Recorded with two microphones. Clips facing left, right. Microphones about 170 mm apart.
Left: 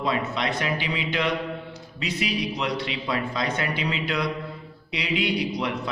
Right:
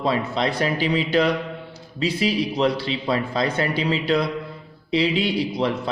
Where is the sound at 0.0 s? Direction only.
30° right (ahead or behind).